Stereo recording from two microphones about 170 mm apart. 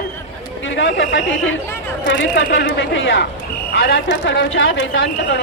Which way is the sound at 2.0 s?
90° left.